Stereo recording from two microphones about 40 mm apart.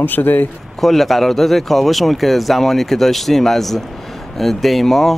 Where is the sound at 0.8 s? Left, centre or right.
Centre.